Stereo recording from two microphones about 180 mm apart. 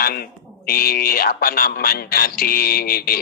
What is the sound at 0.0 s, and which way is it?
Speech, 60° left (ahead or behind).